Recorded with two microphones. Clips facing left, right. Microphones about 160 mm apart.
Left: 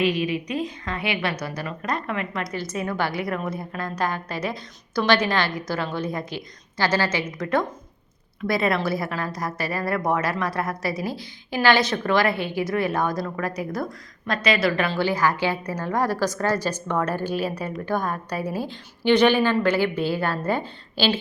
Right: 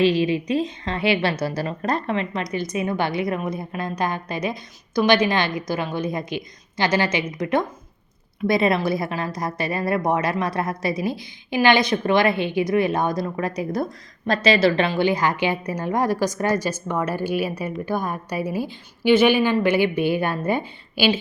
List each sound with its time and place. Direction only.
0.0 s a woman's voice: 30° right (ahead or behind); by 21.2 s 10° right (ahead or behind)